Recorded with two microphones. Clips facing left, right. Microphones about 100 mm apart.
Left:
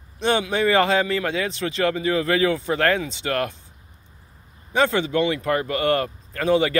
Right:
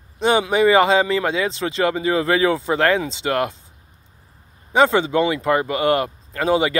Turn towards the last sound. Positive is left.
turn(degrees=-20)  # may be behind; listen again after turning